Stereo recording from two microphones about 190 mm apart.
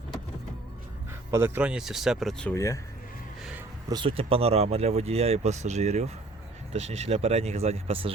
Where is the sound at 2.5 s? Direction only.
15° left (ahead or behind).